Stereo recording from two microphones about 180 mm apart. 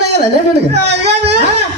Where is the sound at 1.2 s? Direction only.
35° right (ahead or behind).